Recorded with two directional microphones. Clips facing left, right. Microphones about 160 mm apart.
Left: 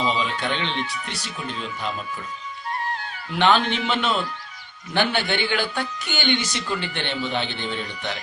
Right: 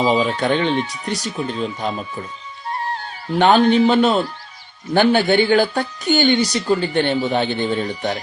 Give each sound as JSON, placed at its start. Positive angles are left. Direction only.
{"t": 0.1, "sound": "speech", "side_deg": -45}
{"t": 2.6, "sound": "music", "side_deg": -30}
{"t": 4.9, "sound": "speech", "side_deg": -40}